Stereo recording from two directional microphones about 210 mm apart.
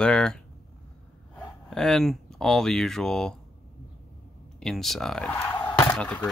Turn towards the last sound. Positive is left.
turn(degrees=5)  # may be behind; listen again after turning